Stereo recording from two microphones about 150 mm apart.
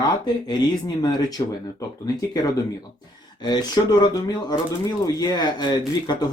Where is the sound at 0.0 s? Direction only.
30° left (ahead or behind).